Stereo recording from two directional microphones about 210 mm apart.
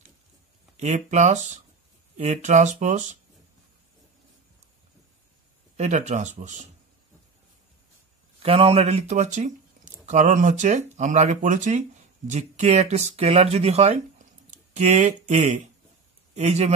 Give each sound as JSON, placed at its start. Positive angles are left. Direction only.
{"t": 0.7, "sound": "speech", "side_deg": -35}
{"t": 5.8, "sound": "speech", "side_deg": -35}
{"t": 8.4, "sound": "speech", "side_deg": -25}